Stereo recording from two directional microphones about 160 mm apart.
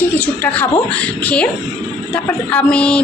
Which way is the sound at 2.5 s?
5° left (ahead or behind).